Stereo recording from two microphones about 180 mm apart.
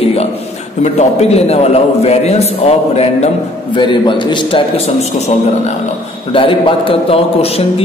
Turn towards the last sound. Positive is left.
turn(degrees=30)  # may be behind; listen again after turning